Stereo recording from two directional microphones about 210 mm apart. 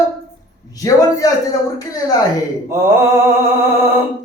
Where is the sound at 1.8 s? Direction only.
15° left (ahead or behind).